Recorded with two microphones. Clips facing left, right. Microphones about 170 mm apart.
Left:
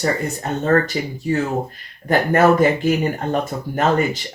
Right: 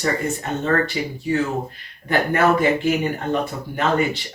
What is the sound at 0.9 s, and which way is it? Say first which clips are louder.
Speech: left 1 dB; 40° left (ahead or behind).